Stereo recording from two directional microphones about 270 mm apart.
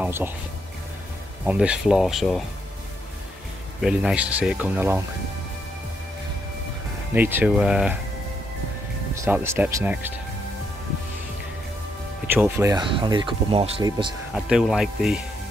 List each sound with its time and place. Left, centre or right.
0.0 s speech: centre
1.4 s speech: centre
3.8 s speech: centre
7.2 s speech: centre
9.2 s speech: centre
12.3 s speech: centre
14.3 s speech: centre